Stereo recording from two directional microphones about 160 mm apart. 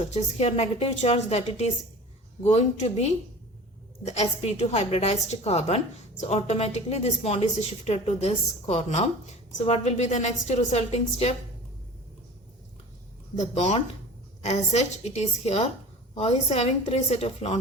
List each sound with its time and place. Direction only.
0.0 s a woman's voice: 40° left (ahead or behind)
13.3 s a woman's voice: 45° left (ahead or behind)